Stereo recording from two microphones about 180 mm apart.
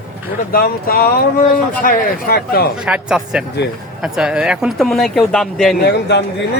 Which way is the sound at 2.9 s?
5° right (ahead or behind).